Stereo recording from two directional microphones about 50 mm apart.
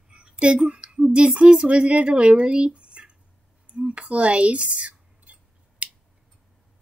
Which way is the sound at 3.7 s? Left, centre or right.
Right.